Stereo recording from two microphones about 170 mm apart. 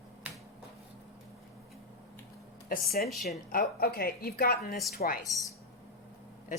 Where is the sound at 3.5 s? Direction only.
60° left (ahead or behind).